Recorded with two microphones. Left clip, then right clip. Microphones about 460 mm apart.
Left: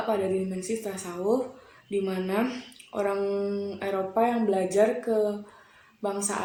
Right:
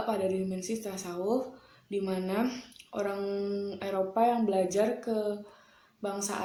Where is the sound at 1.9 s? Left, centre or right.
Right.